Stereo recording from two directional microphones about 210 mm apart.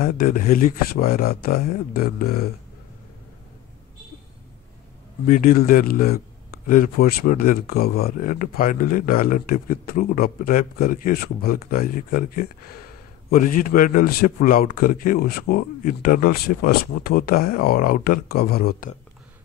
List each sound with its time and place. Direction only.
0.0 s a man's voice: 40° left (ahead or behind)
5.2 s a man's voice: 40° left (ahead or behind)